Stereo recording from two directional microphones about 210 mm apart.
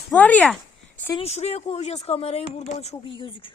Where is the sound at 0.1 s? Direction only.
5° left (ahead or behind).